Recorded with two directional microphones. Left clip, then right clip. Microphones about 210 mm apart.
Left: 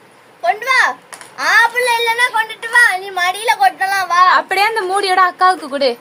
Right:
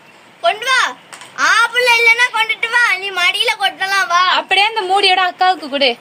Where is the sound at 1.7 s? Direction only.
25° right (ahead or behind).